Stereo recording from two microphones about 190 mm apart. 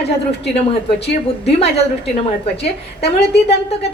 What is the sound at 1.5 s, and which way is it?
Speech, 35° left (ahead or behind).